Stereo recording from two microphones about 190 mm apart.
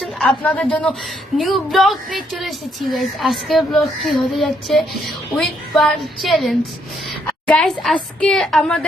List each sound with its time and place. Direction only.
0.0 s a woman's voice: centre (ahead or behind)